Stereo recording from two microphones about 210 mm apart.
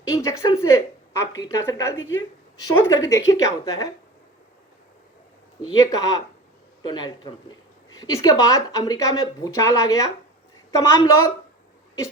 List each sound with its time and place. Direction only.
0.0 s a woman's voice: 15° left (ahead or behind)
5.6 s speech: 15° left (ahead or behind)